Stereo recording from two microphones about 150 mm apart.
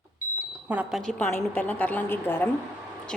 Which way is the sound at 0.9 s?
Centre (ahead or behind).